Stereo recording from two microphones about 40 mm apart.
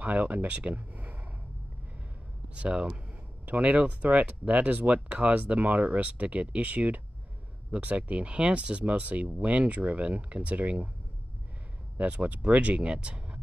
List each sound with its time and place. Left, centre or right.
0.0 s speech: right
2.5 s speech: right
12.0 s speech: right